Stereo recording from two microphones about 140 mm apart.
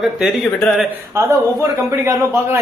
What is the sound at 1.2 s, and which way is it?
A man's voice, 20° right (ahead or behind).